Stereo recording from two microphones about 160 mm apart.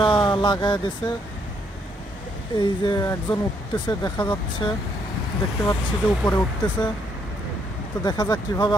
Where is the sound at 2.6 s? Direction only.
25° left (ahead or behind).